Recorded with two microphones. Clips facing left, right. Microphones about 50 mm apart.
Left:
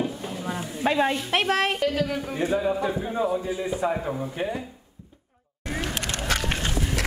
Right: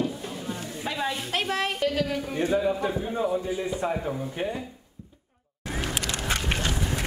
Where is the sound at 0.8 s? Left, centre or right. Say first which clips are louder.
Left 8 dB; left.